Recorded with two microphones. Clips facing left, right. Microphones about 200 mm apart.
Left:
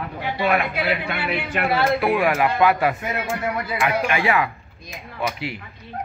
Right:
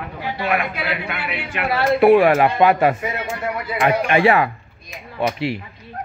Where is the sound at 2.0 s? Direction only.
30° right (ahead or behind).